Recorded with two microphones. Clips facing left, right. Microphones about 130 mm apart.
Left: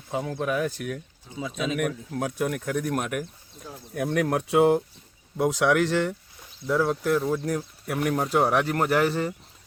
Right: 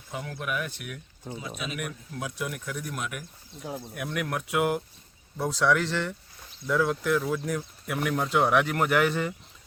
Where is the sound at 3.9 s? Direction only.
35° left (ahead or behind).